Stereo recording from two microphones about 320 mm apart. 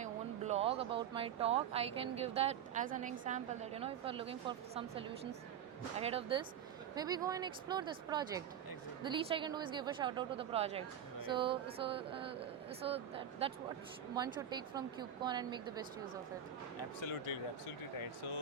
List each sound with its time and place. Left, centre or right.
0.0 s a woman's voice: right